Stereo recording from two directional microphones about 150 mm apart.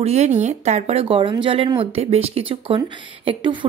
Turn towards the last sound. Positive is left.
turn(degrees=-35)  # may be behind; listen again after turning